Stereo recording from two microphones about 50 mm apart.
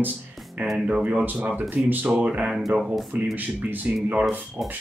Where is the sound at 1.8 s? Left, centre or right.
Right.